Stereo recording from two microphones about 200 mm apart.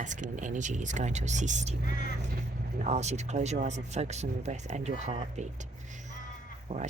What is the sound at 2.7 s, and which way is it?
Speech, 35° right (ahead or behind).